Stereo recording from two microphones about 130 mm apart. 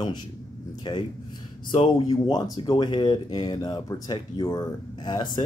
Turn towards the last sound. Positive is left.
turn(degrees=35)  # may be behind; listen again after turning